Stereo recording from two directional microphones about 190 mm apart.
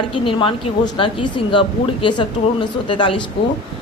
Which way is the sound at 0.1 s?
25° left (ahead or behind).